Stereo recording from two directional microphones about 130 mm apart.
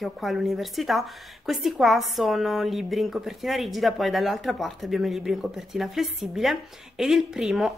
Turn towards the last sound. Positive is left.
turn(degrees=-5)  # may be behind; listen again after turning